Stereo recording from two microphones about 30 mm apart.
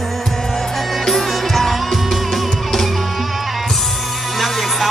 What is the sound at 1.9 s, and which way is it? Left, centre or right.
Music, centre.